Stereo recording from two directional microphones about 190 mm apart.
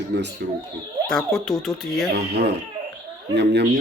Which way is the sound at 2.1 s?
60° right (ahead or behind).